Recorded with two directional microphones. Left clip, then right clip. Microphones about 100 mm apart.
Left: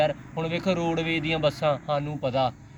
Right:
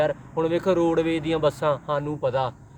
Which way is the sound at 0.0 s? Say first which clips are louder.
Right 2 dB; 50° right (ahead or behind).